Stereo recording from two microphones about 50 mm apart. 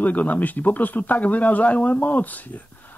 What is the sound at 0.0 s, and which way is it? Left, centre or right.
Speech, left.